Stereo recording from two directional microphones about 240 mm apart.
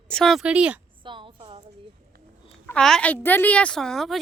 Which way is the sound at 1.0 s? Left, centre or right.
Centre.